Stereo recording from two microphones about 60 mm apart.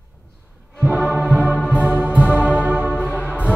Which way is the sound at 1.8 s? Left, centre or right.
Right.